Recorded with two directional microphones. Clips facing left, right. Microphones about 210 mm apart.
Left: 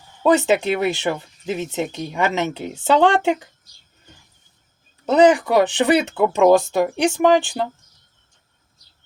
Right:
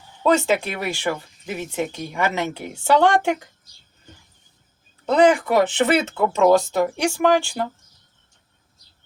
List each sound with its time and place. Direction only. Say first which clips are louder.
0.2 s speech: left 2 dB; 15° left (ahead or behind)
5.0 s speech: left 2 dB; 20° left (ahead or behind)